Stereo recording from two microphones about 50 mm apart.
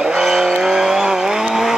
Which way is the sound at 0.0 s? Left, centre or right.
Centre.